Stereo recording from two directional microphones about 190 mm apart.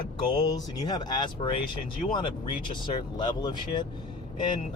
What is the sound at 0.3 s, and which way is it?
Speech, 20° left (ahead or behind).